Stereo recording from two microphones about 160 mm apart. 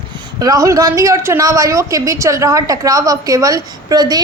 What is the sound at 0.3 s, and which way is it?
A woman's voice, 20° right (ahead or behind).